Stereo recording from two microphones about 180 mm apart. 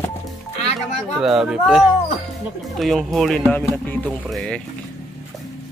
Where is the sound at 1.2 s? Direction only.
Centre (ahead or behind).